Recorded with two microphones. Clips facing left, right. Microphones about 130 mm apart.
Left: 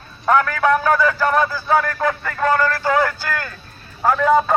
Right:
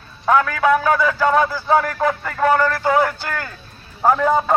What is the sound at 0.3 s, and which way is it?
A man's voice, 10° right (ahead or behind).